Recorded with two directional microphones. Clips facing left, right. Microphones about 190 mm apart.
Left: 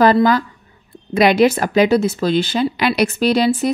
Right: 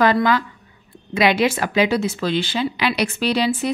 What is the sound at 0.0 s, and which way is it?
Speech, 40° left (ahead or behind).